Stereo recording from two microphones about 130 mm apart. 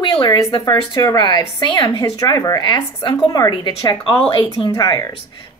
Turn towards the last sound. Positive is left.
turn(degrees=30)  # may be behind; listen again after turning